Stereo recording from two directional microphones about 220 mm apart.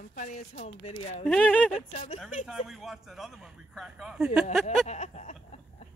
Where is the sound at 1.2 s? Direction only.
5° left (ahead or behind).